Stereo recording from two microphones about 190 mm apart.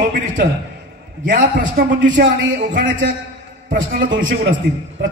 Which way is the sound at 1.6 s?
60° right (ahead or behind).